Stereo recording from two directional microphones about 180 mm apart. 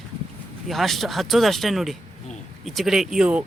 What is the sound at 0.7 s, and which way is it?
Speech, centre (ahead or behind).